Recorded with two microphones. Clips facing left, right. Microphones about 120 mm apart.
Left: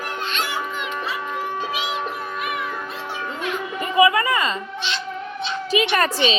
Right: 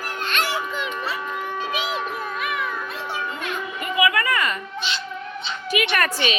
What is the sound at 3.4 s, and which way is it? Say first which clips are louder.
Children playing: left 3 dB; 30° left (ahead or behind).